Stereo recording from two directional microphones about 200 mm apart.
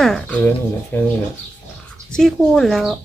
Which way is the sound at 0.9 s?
10° left (ahead or behind).